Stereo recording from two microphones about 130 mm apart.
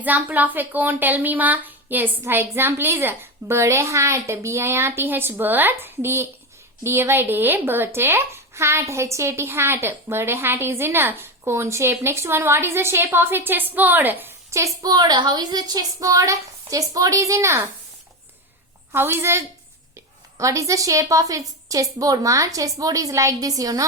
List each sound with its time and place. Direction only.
0.0 s speech: 15° right (ahead or behind)
14.8 s a woman's voice: 30° right (ahead or behind)
18.9 s a woman's voice: 20° right (ahead or behind)